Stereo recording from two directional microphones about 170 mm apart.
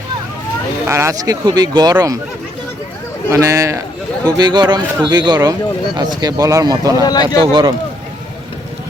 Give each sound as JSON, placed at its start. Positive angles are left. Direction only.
{"t": 0.9, "sound": "speech", "side_deg": -15}
{"t": 3.2, "sound": "speech", "side_deg": -15}
{"t": 7.0, "sound": "speech", "side_deg": 25}
{"t": 7.3, "sound": "speech", "side_deg": -30}